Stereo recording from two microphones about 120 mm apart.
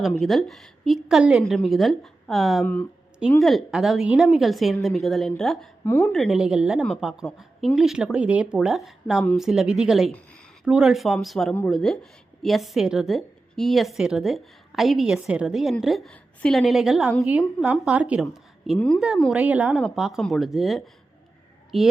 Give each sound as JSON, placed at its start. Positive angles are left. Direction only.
{"t": 0.1, "sound": "a woman's voice", "side_deg": 0}
{"t": 5.8, "sound": "speech", "side_deg": 15}
{"t": 6.1, "sound": "a woman's voice", "side_deg": -5}
{"t": 10.1, "sound": "a sound", "side_deg": 10}
{"t": 10.7, "sound": "a woman's voice", "side_deg": -5}